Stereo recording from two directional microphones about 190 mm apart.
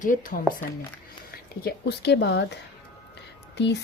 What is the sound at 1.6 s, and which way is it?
Speech, 60° left (ahead or behind).